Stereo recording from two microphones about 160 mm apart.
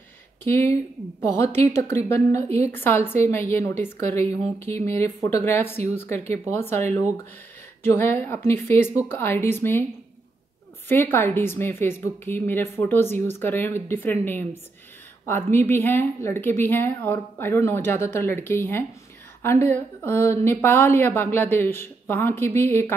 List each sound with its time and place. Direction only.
0.5 s a woman's voice: 15° left (ahead or behind)
10.9 s a woman's voice: 15° left (ahead or behind)